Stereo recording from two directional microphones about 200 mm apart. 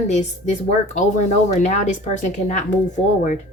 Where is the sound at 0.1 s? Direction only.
35° left (ahead or behind).